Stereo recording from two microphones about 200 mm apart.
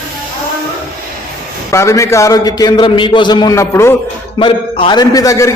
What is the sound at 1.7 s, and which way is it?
A man's voice, 15° left (ahead or behind).